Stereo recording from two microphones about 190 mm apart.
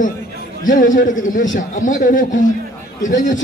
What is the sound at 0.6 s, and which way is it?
A man's voice, 45° left (ahead or behind).